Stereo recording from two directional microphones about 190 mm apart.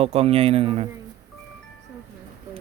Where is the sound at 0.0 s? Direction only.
35° right (ahead or behind).